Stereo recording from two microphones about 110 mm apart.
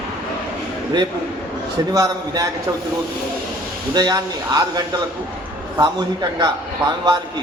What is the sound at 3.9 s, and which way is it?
A man's voice, 40° right (ahead or behind).